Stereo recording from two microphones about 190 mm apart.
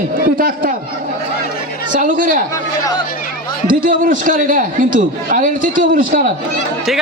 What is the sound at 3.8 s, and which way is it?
A man's voice, 45° right (ahead or behind).